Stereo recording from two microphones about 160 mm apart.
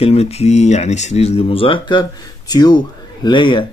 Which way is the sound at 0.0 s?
40° left (ahead or behind).